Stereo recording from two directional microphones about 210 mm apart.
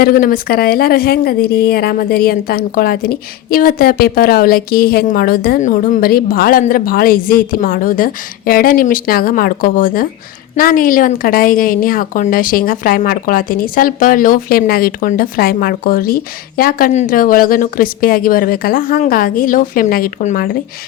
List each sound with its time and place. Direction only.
0.0 s speech: 45° left (ahead or behind)